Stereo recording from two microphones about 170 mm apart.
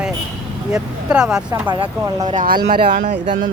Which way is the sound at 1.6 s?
30° right (ahead or behind).